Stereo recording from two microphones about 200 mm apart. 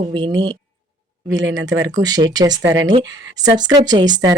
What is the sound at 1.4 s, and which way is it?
Speech, 70° right (ahead or behind).